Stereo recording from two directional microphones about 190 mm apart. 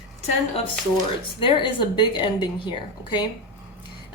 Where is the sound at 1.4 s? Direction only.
25° left (ahead or behind).